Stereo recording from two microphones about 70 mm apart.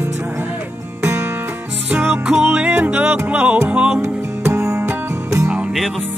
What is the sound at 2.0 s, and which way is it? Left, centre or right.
Music, centre.